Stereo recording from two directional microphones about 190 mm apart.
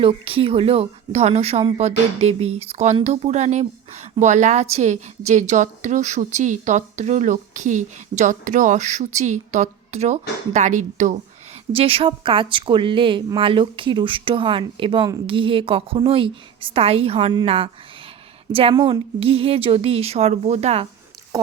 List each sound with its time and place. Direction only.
0.0 s a woman's voice: 30° right (ahead or behind)
11.7 s a woman's voice: 30° right (ahead or behind)